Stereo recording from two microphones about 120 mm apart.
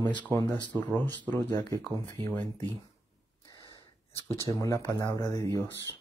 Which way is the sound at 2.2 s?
20° left (ahead or behind).